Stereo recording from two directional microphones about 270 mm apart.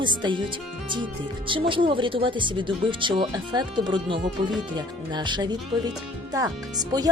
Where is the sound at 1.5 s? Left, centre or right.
Centre.